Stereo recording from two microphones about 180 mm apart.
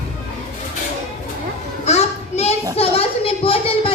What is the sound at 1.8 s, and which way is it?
Child singing, 35° left (ahead or behind).